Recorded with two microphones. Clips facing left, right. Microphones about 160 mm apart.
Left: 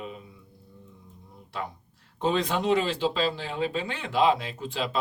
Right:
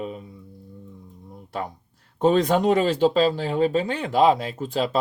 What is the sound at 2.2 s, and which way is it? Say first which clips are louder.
Speech: right 7 dB; 45° right (ahead or behind).